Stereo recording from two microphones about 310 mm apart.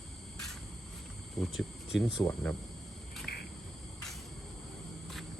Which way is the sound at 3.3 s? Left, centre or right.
Left.